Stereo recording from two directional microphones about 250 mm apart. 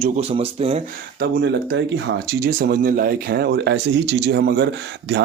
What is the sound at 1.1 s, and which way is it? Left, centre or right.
Speech, right.